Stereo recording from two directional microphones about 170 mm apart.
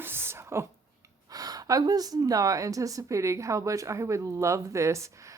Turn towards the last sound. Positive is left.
turn(degrees=-15)  # may be behind; listen again after turning